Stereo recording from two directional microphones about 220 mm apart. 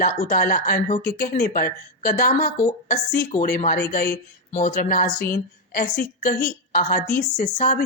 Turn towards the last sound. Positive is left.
turn(degrees=35)  # may be behind; listen again after turning